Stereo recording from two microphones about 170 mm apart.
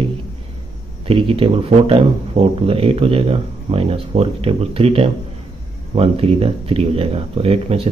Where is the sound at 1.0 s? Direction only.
30° right (ahead or behind).